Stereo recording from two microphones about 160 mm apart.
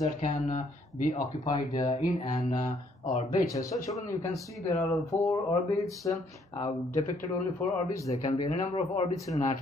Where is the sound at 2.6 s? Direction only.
50° left (ahead or behind).